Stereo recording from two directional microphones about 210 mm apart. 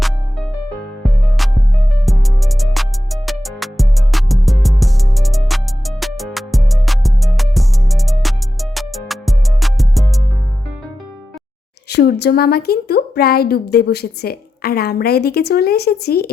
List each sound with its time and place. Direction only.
0.0 s music: centre (ahead or behind)
11.9 s a woman's voice: 50° left (ahead or behind)